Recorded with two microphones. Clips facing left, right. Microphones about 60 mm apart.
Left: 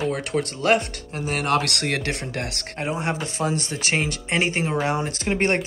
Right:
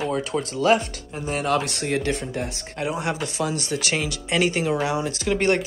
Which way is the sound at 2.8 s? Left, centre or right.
Left.